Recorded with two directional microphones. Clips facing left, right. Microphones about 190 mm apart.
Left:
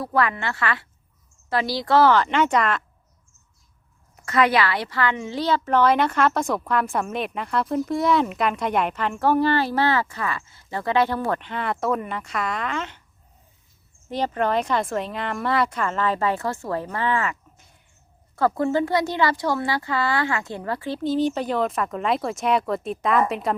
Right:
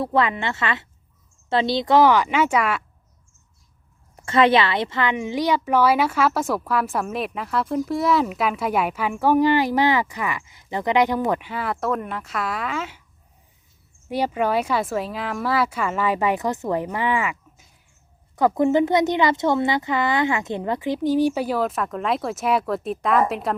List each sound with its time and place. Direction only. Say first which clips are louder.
0.0 s a woman's voice: right 2 dB; 25° right (ahead or behind)
4.3 s a woman's voice: right 3 dB; 25° right (ahead or behind); by 13.0 s 5° right (ahead or behind)
14.1 s a woman's voice: right 1 dB; 10° right (ahead or behind)